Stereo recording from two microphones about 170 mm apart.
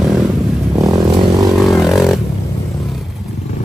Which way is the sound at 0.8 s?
20° right (ahead or behind).